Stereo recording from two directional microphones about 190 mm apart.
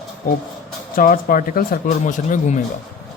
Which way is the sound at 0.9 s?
45° left (ahead or behind).